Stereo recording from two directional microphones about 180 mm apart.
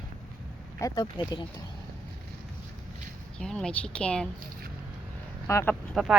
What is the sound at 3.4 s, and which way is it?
Speech, 5° left (ahead or behind).